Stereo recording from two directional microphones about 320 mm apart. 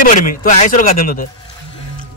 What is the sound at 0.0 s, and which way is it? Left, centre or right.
Speech, left.